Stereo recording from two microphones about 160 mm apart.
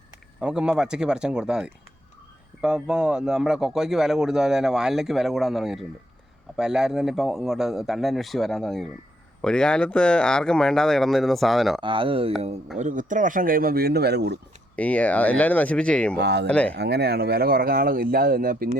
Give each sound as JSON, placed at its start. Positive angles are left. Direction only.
{"t": 0.3, "sound": "a man's voice", "side_deg": -5}
{"t": 11.8, "sound": "speech", "side_deg": -30}
{"t": 12.8, "sound": "speech", "side_deg": -55}
{"t": 14.8, "sound": "speech", "side_deg": 10}
{"t": 16.1, "sound": "speech", "side_deg": -90}
{"t": 16.5, "sound": "speech", "side_deg": 5}
{"t": 16.7, "sound": "speech", "side_deg": -90}